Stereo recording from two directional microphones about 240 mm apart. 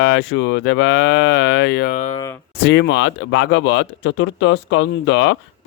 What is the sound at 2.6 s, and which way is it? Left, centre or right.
Cattle, left.